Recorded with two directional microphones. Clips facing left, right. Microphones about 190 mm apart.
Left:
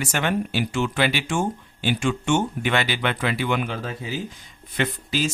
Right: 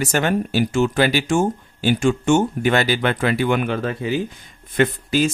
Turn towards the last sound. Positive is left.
turn(degrees=-50)  # may be behind; listen again after turning